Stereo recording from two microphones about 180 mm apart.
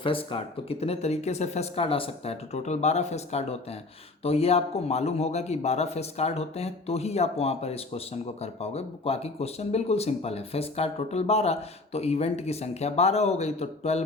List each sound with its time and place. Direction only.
0.0 s speech: 30° left (ahead or behind)